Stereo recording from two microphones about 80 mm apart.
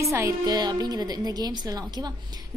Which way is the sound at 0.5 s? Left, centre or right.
Right.